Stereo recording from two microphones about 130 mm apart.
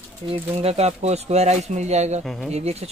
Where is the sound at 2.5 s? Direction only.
55° right (ahead or behind).